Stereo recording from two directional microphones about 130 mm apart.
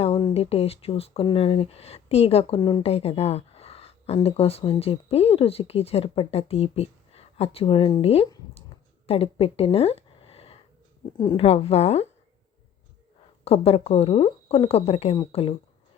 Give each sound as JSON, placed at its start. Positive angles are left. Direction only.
{"t": 0.0, "sound": "speech", "side_deg": 45}
{"t": 2.6, "sound": "speech", "side_deg": 35}
{"t": 2.8, "sound": "speech", "side_deg": 50}
{"t": 9.0, "sound": "a sound", "side_deg": 50}
{"t": 11.2, "sound": "speech", "side_deg": 35}
{"t": 11.4, "sound": "speech", "side_deg": 50}
{"t": 13.4, "sound": "speech", "side_deg": 50}